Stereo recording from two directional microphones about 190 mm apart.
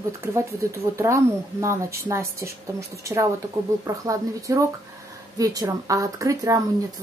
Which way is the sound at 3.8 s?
20° right (ahead or behind).